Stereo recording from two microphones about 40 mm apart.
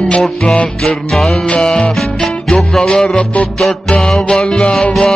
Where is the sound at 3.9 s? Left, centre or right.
Centre.